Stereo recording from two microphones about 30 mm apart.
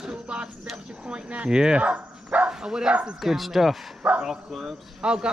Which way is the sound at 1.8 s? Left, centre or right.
Right.